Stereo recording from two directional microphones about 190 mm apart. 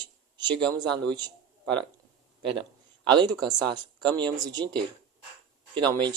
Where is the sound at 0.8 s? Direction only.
20° right (ahead or behind).